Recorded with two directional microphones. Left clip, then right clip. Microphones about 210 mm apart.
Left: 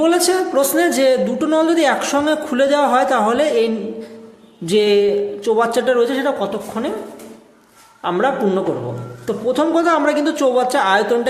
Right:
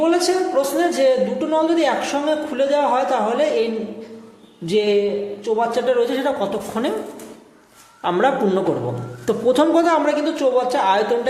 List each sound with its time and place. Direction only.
0.0 s speech: 30° left (ahead or behind); by 6.6 s 15° left (ahead or behind)
8.0 s a man's voice: 5° left (ahead or behind)
9.7 s speech: 15° left (ahead or behind)